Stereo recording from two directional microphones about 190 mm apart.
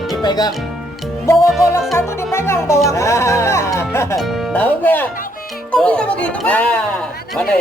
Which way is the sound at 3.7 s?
15° left (ahead or behind).